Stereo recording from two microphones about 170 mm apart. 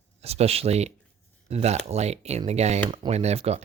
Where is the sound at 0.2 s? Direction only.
40° right (ahead or behind).